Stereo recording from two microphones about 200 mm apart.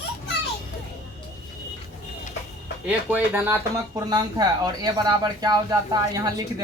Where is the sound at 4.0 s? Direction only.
20° right (ahead or behind).